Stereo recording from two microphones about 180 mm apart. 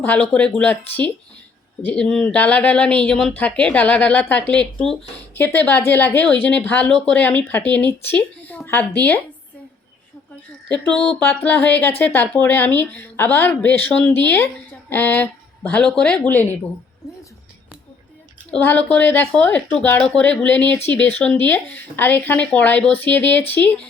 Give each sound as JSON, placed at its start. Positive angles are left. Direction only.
{"t": 0.0, "sound": "speech", "side_deg": 10}
{"t": 10.7, "sound": "a sound", "side_deg": 5}
{"t": 11.2, "sound": "speech", "side_deg": 10}
{"t": 18.5, "sound": "speech", "side_deg": 10}